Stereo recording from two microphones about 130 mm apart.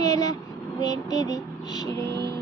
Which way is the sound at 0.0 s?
30° left (ahead or behind).